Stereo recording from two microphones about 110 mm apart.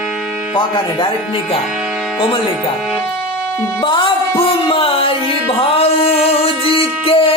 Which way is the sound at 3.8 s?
45° left (ahead or behind).